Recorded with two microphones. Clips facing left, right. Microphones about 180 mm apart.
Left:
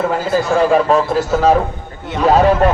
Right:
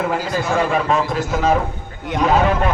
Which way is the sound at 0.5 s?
35° left (ahead or behind).